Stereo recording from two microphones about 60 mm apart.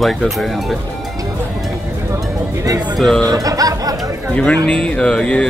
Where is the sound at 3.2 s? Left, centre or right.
Right.